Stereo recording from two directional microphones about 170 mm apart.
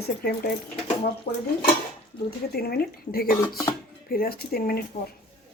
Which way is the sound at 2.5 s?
65° left (ahead or behind).